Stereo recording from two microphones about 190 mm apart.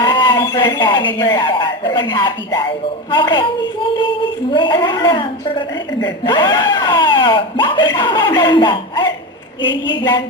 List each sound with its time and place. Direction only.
0.0 s a woman's voice: 25° left (ahead or behind)